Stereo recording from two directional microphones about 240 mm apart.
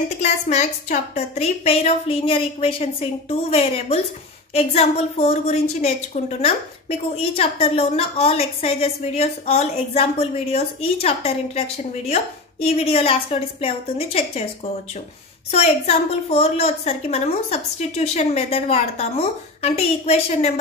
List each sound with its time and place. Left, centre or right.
0.2 s a woman's voice: left
15.5 s a woman's voice: left